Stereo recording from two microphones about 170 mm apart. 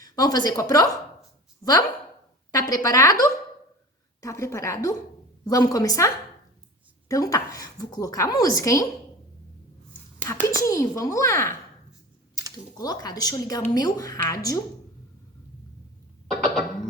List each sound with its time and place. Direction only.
0.0 s a woman's voice: 20° left (ahead or behind)
2.5 s a woman's voice: 20° left (ahead or behind)
7.1 s a woman's voice: 20° left (ahead or behind)
10.2 s a woman's voice: 15° left (ahead or behind)
12.7 s a woman's voice: 20° left (ahead or behind)